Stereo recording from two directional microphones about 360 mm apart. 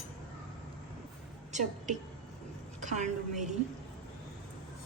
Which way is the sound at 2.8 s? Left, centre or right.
Centre.